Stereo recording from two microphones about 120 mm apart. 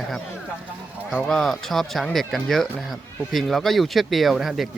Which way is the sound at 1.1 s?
5° left (ahead or behind).